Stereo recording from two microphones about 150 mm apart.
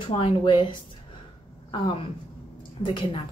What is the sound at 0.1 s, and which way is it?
Speech, 35° left (ahead or behind).